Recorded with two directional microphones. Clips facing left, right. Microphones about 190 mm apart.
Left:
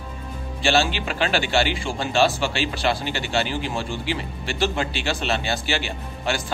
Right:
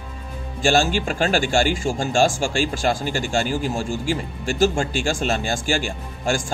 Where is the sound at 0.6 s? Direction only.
45° right (ahead or behind).